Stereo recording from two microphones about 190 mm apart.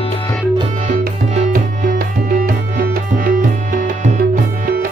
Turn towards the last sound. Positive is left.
turn(degrees=-45)  # may be behind; listen again after turning